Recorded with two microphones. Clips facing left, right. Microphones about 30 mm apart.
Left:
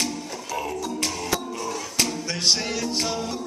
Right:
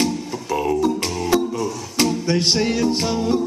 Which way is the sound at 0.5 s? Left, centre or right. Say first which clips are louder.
Right 10 dB; right.